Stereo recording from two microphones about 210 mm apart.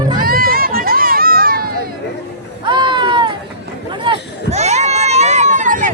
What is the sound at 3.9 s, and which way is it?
Run, 25° right (ahead or behind).